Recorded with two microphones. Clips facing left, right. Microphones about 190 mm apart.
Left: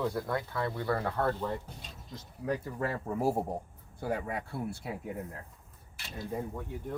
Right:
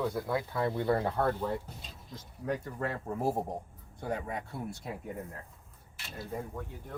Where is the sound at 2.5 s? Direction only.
5° left (ahead or behind).